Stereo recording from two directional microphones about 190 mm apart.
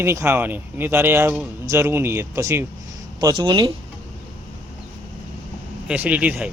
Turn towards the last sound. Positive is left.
turn(degrees=-5)  # may be behind; listen again after turning